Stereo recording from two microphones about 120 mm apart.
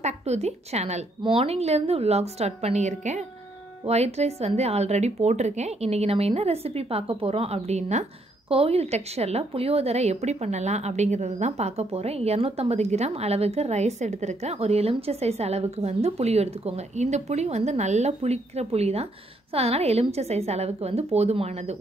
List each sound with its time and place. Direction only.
0.0 s a woman's voice: 65° right (ahead or behind)
1.2 s a woman's voice: 55° right (ahead or behind); by 3.3 s 75° right (ahead or behind)
3.8 s a woman's voice: 60° right (ahead or behind)
8.5 s a woman's voice: 55° right (ahead or behind)